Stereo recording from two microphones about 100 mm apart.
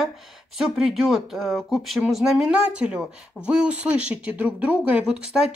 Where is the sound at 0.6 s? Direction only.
Centre (ahead or behind).